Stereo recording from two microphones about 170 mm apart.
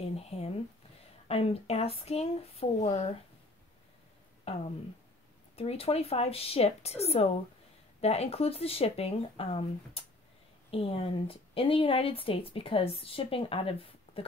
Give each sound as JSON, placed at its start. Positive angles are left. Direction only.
{"t": 0.0, "sound": "a sound", "side_deg": 35}
{"t": 1.3, "sound": "a woman's voice", "side_deg": 35}
{"t": 4.5, "sound": "a woman's voice", "side_deg": 35}